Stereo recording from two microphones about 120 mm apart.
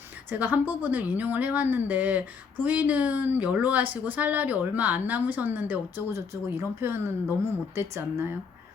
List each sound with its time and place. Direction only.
0.3 s speech: 15° right (ahead or behind)